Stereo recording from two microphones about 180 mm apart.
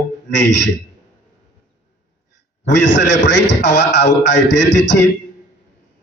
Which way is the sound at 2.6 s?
80° left.